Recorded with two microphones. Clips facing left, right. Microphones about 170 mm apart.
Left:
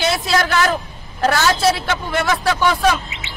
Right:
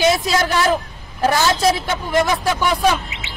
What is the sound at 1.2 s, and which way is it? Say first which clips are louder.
Speech: even; 15° right (ahead or behind).